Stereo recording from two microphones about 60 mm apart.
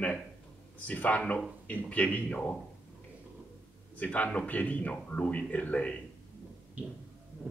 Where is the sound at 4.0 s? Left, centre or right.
Left.